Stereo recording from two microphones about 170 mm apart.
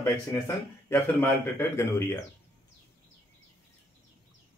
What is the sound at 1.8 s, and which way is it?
Speech, 15° left (ahead or behind).